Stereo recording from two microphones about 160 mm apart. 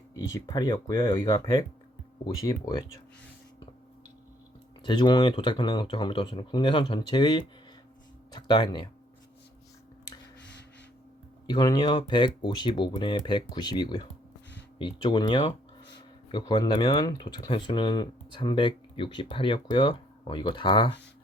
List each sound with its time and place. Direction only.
0.2 s speech: 20° left (ahead or behind)
4.8 s speech: 30° left (ahead or behind)
11.4 s speech: 25° left (ahead or behind)